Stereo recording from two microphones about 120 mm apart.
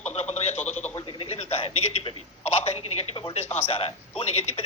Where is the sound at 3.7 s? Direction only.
55° left (ahead or behind).